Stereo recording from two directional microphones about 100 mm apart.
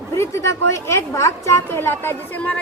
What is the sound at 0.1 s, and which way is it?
A woman's voice, 30° left (ahead or behind).